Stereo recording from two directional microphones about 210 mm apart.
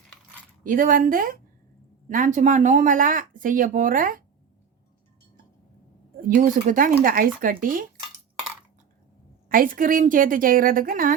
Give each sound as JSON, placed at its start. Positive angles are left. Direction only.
{"t": 0.6, "sound": "speech", "side_deg": -40}
{"t": 6.2, "sound": "speech", "side_deg": -40}
{"t": 9.5, "sound": "speech", "side_deg": -40}